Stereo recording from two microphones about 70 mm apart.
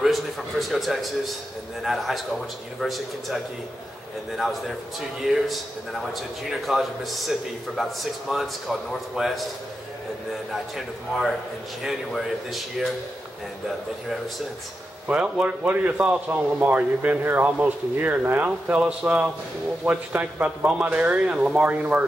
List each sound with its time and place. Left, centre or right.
0.0 s a man's voice: centre
4.4 s a man's voice: centre
11.8 s a man's voice: centre
15.0 s speech: centre
17.2 s speech: right